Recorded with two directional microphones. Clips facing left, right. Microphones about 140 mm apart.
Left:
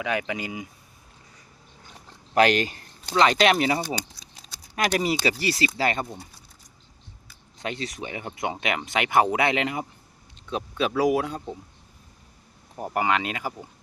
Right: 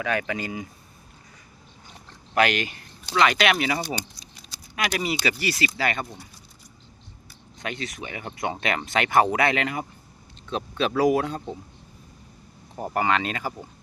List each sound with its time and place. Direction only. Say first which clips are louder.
0.0 s speech: right 1 dB; 15° left (ahead or behind)
2.3 s speech: left 3 dB; 35° left (ahead or behind)
7.6 s speech: left 1 dB; 30° left (ahead or behind)
10.5 s speech: right 1 dB; 10° left (ahead or behind)
12.7 s speech: right 1 dB; 5° left (ahead or behind)